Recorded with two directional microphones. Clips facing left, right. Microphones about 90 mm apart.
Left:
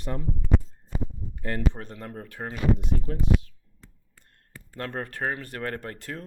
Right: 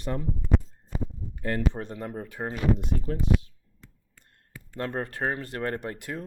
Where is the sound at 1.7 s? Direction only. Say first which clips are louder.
Right 4 dB; 20° right (ahead or behind).